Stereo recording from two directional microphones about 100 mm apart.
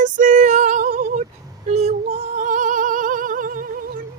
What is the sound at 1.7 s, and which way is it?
Female singing, 90° right.